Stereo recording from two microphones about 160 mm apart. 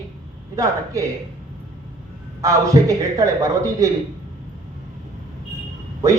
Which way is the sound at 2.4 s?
20° right (ahead or behind).